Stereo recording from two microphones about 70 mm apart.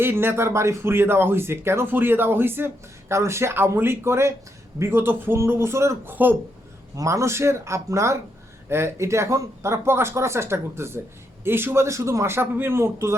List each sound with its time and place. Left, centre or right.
0.0 s speech: right
6.1 s speech: right
6.9 s speech: right